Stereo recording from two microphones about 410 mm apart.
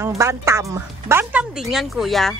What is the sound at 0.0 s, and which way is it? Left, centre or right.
Speech, centre.